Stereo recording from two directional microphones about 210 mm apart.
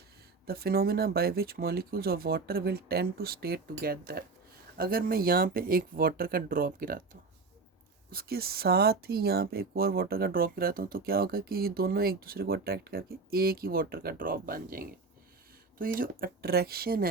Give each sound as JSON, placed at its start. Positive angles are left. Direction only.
{"t": 0.4, "sound": "speech", "side_deg": -45}